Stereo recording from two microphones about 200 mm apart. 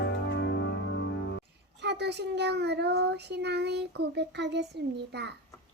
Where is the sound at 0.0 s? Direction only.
60° left (ahead or behind).